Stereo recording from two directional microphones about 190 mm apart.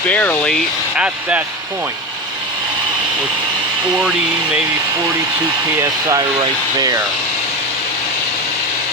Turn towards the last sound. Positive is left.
turn(degrees=-20)  # may be behind; listen again after turning